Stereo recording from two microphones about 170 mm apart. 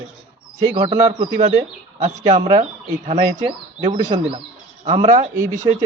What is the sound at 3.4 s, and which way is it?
Speech, 30° right (ahead or behind).